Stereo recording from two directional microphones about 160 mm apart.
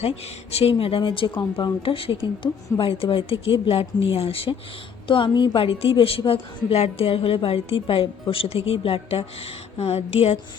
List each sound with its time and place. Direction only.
0.5 s a woman's voice: 35° left (ahead or behind)